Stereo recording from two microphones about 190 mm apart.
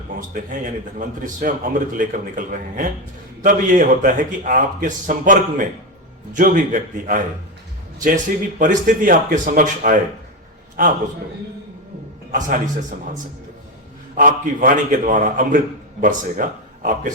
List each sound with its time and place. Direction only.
0.3 s a man's voice: 45° right (ahead or behind)
12.3 s a man's voice: 45° right (ahead or behind)
14.2 s a man's voice: 45° right (ahead or behind)